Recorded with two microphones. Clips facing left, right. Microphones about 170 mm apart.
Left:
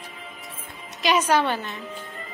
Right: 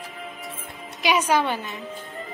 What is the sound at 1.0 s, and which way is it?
Speech, 10° right (ahead or behind).